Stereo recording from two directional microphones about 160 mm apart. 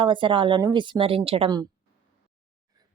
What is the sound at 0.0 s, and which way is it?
A woman's voice, 30° right (ahead or behind).